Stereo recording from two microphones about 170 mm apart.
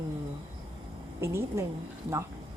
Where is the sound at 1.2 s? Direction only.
15° right (ahead or behind).